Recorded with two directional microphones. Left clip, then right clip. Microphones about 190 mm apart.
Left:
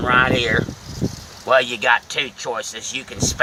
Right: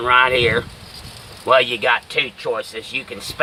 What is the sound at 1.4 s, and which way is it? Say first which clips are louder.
Speech: right 1 dB; 20° right (ahead or behind).